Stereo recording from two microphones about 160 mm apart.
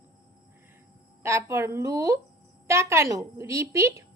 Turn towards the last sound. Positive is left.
turn(degrees=-20)  # may be behind; listen again after turning